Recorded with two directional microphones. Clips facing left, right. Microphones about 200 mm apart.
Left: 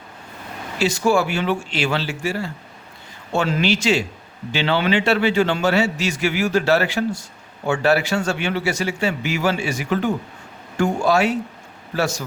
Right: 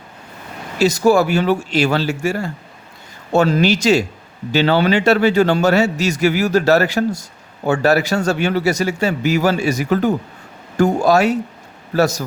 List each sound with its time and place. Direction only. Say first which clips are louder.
0.8 s a man's voice: right 5 dB; 40° right (ahead or behind)